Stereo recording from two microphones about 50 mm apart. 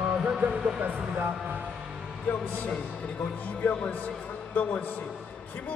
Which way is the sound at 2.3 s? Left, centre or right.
Left.